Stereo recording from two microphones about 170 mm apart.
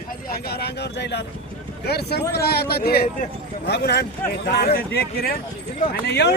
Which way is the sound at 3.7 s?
80° left.